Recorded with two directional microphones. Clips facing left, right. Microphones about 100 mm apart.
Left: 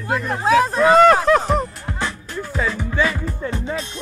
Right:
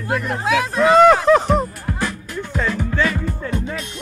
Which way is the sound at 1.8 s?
25° left (ahead or behind).